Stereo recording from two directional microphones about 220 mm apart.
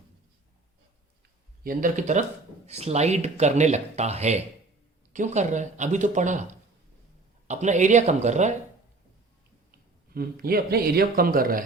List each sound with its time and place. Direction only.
1.6 s speech: 40° right (ahead or behind)
10.2 s speech: 45° right (ahead or behind)